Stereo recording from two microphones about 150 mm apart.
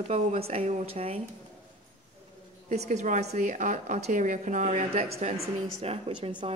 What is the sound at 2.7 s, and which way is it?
A woman's voice, 50° right (ahead or behind).